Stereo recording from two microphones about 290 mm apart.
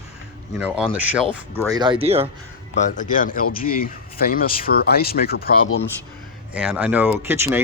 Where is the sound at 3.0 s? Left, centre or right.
Left.